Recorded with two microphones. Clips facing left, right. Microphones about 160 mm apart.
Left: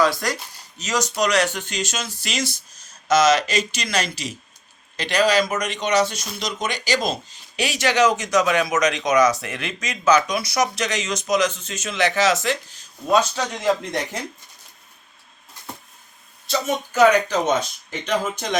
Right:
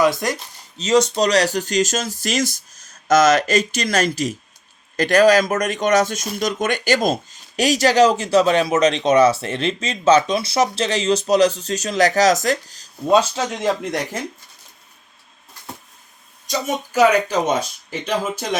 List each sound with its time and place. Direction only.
0.0 s speech: 20° right (ahead or behind); by 12.9 s 40° right (ahead or behind)
13.1 s speech: 25° right (ahead or behind)
16.5 s speech: 10° right (ahead or behind)